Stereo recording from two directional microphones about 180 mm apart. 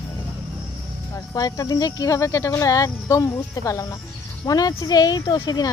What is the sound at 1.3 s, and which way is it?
Speech, 20° left (ahead or behind).